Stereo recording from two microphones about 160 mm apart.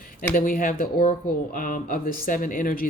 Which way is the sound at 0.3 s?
60° left (ahead or behind).